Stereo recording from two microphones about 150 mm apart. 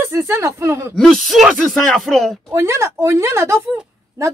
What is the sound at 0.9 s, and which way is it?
Speech, centre (ahead or behind).